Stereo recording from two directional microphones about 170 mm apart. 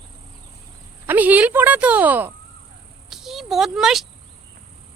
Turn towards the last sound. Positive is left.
turn(degrees=0)  # may be behind; listen again after turning